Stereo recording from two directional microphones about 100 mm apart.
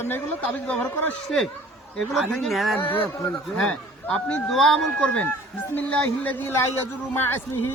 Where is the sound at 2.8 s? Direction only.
20° left (ahead or behind).